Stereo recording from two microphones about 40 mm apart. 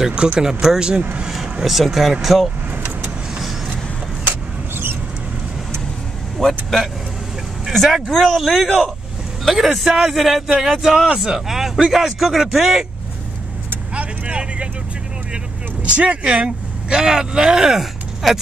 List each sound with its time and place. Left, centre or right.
0.0 s speech: centre
1.4 s speech: centre
4.3 s vehicle: right
6.3 s speech: centre
9.8 s speech: centre
10.1 s speech: centre
13.9 s vehicle: right
16.4 s speech: centre